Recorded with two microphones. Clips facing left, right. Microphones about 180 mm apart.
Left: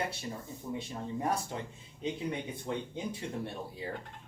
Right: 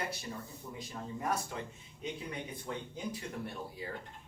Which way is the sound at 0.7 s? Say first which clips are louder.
Left 5 dB; 30° left (ahead or behind).